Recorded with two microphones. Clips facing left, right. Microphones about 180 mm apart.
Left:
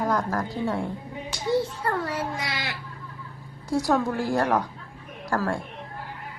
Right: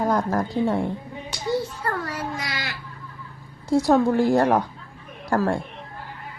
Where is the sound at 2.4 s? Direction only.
25° left (ahead or behind).